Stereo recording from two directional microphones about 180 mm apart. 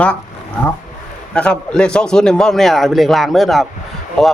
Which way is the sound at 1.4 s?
5° left (ahead or behind).